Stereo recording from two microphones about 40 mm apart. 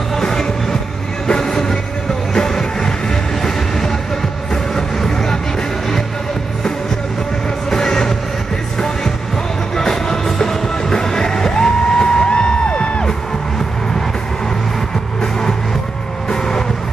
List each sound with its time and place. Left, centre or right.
0.1 s music: centre
1.2 s train: centre
2.3 s music: centre
7.7 s music: centre
9.8 s music: centre; by 13.0 s left
16.3 s vehicle: centre